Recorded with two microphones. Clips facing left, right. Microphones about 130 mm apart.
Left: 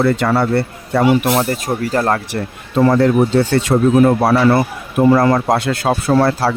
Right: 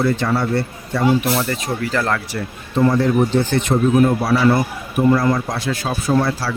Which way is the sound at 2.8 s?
75° left (ahead or behind).